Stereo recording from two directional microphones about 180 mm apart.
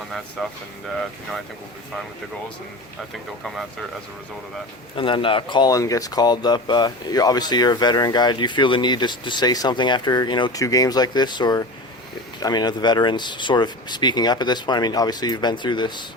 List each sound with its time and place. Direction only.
0.4 s speech: 5° left (ahead or behind)
3.4 s speech: centre (ahead or behind)
4.9 s speech: 30° left (ahead or behind)